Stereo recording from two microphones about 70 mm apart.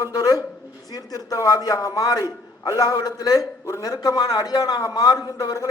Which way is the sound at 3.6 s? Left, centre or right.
Left.